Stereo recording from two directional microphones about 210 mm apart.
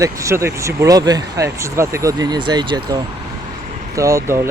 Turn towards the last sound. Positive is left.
turn(degrees=-15)  # may be behind; listen again after turning